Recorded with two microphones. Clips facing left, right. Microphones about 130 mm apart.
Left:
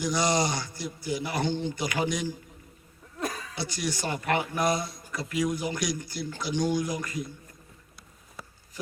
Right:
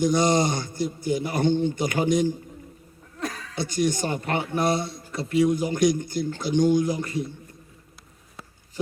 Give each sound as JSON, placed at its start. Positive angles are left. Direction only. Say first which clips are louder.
{"t": 0.0, "sound": "a man's voice", "louder": "right 5 dB", "side_deg": -50}
{"t": 3.2, "sound": "a sound", "louder": "right 1 dB", "side_deg": 15}
{"t": 3.5, "sound": "a man's voice", "louder": "right 8 dB", "side_deg": -50}
{"t": 4.1, "sound": "a man's voice", "louder": "right 2 dB", "side_deg": -25}
{"t": 5.7, "sound": "a man's voice", "louder": "right 10 dB", "side_deg": -50}
{"t": 6.7, "sound": "a man's voice", "louder": "right 6 dB", "side_deg": -30}